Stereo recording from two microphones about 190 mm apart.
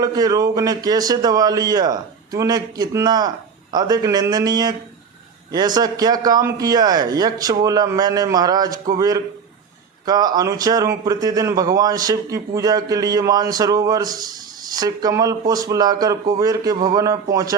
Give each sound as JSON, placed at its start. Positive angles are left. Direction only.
{"t": 0.0, "sound": "a man's voice", "side_deg": -20}